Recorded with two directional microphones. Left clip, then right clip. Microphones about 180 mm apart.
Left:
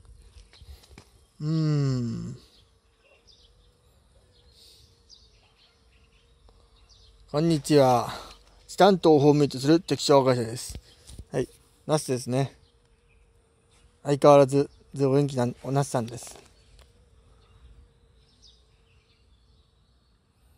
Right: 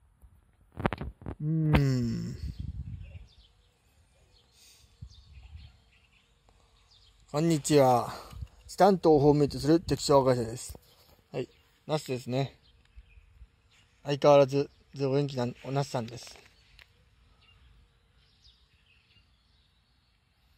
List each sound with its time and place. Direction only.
1.4 s speech: centre (ahead or behind)
1.8 s a sound: 15° right (ahead or behind)
7.2 s speech: centre (ahead or behind)
11.3 s a sound: 10° left (ahead or behind)
12.3 s speech: 5° left (ahead or behind)
14.0 s speech: 15° left (ahead or behind)